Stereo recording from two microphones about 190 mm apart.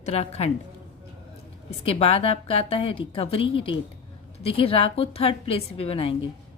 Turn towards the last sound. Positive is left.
turn(degrees=30)  # may be behind; listen again after turning